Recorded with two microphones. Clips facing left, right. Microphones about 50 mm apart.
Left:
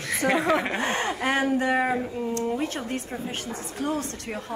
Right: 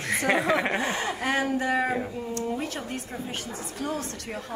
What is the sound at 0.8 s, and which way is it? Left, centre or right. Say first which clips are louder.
Speech: left 2 dB; left.